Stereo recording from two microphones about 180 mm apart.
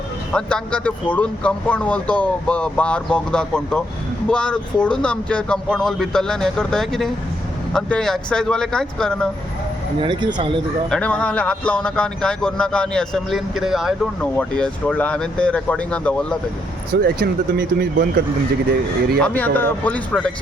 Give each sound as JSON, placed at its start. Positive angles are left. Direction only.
{"t": 0.3, "sound": "a man's voice", "side_deg": 5}
{"t": 10.0, "sound": "speech", "side_deg": -25}
{"t": 10.8, "sound": "speech", "side_deg": 5}
{"t": 17.0, "sound": "speech", "side_deg": -60}
{"t": 19.2, "sound": "a man's voice", "side_deg": 10}